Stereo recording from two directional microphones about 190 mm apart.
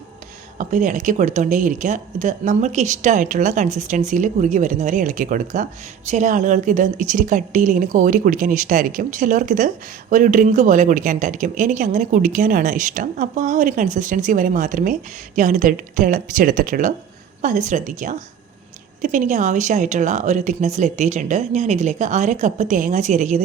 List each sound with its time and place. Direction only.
0.6 s a woman's voice: 45° right (ahead or behind)